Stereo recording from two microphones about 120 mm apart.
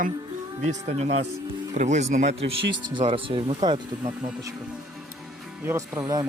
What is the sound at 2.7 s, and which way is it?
Speech, 40° right (ahead or behind).